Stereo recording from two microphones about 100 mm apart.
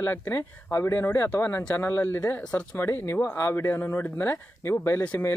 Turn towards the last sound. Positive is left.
turn(degrees=20)  # may be behind; listen again after turning